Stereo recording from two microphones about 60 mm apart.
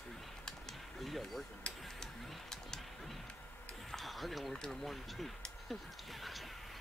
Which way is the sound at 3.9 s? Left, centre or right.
Centre.